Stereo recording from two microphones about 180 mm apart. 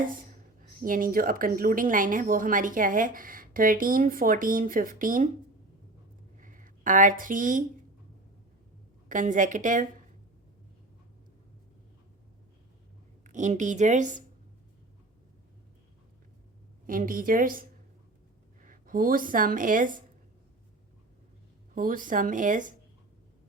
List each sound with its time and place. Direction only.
0.8 s a woman's voice: 50° right (ahead or behind)
6.4 s a sound: 45° right (ahead or behind)
9.0 s a woman's voice: 45° right (ahead or behind)
13.2 s a woman's voice: 45° right (ahead or behind)
16.8 s a woman's voice: 50° right (ahead or behind)
18.6 s speech: 50° right (ahead or behind)
21.8 s a woman's voice: 50° right (ahead or behind)